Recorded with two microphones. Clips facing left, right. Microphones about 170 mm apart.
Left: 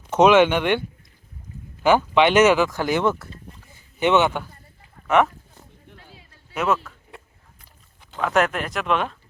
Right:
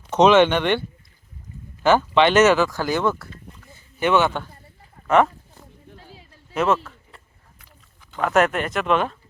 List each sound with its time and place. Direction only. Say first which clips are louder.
0.2 s a man's voice: even; 10° left (ahead or behind)
5.0 s speech: right 1 dB; centre (ahead or behind)
6.5 s speech: right 2 dB; centre (ahead or behind)
8.2 s speech: right 2 dB; centre (ahead or behind)